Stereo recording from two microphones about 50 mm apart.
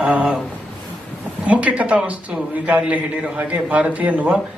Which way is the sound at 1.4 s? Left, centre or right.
Right.